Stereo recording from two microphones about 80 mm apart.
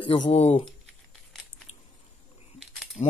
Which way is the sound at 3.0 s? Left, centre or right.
Left.